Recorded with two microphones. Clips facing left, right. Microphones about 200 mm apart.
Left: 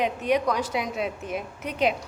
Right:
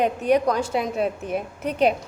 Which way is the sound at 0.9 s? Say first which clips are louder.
Right 5 dB; 50° right (ahead or behind).